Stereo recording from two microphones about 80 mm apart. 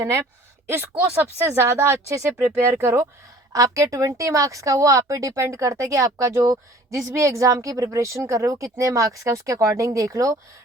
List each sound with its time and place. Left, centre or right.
0.7 s a woman's voice: right